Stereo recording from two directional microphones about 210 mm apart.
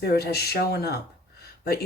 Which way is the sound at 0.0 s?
50° left (ahead or behind).